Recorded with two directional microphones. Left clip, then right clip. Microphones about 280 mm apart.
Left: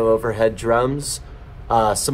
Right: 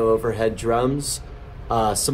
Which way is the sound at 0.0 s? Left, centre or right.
Centre.